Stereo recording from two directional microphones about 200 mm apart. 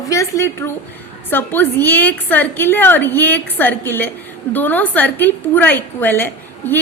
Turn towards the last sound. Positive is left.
turn(degrees=10)  # may be behind; listen again after turning